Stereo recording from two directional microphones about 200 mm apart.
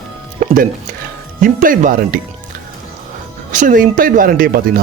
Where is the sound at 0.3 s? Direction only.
45° right (ahead or behind).